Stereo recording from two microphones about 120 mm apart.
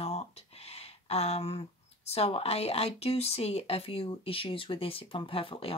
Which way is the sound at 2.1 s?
55° left (ahead or behind).